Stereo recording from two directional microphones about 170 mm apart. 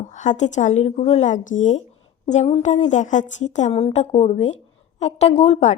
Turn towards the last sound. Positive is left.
turn(degrees=40)  # may be behind; listen again after turning